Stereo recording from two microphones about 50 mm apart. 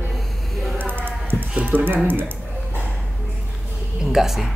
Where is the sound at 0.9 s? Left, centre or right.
Right.